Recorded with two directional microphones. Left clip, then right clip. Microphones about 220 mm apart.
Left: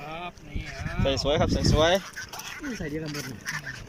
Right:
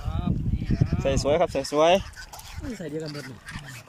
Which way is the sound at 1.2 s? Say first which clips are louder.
Right 4 dB; 10° right (ahead or behind).